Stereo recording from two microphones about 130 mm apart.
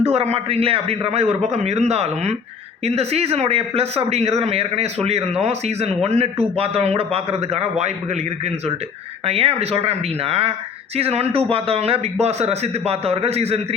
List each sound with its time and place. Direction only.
0.0 s speech: 55° right (ahead or behind)
9.2 s speech: 50° right (ahead or behind)